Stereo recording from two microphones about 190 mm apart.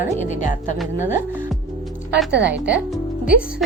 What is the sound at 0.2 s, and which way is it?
Speech, 40° left (ahead or behind).